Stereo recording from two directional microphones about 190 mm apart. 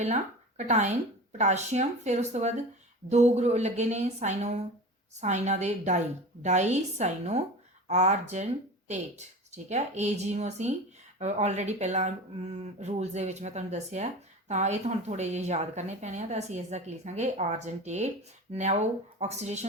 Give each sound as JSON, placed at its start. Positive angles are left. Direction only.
{"t": 0.0, "sound": "speech", "side_deg": -35}